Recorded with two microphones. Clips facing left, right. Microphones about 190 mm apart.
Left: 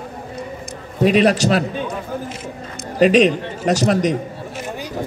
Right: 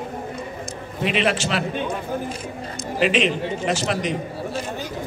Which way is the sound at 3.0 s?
40° left (ahead or behind).